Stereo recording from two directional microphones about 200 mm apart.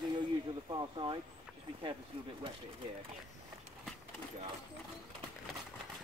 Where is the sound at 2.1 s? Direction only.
30° right (ahead or behind).